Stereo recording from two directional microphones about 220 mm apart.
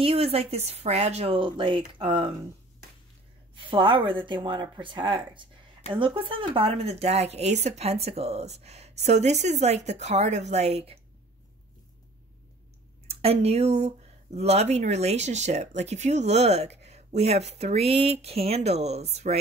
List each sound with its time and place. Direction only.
0.0 s speech: 25° right (ahead or behind)
3.5 s speech: 20° right (ahead or behind)
13.0 s speech: 25° right (ahead or behind)